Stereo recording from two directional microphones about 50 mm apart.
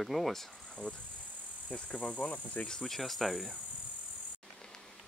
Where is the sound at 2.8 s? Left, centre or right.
Centre.